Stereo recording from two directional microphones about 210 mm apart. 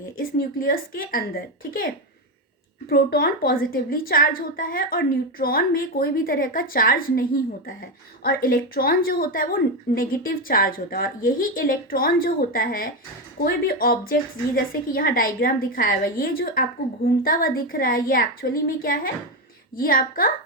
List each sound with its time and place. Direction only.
0.2 s a woman's voice: 45° left (ahead or behind)
2.9 s a woman's voice: 50° left (ahead or behind)